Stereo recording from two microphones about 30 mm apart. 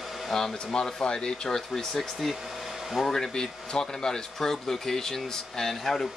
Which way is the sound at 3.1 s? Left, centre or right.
Centre.